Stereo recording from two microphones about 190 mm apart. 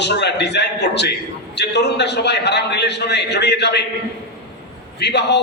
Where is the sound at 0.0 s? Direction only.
60° left (ahead or behind).